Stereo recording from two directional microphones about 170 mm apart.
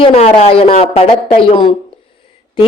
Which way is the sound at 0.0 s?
35° left (ahead or behind).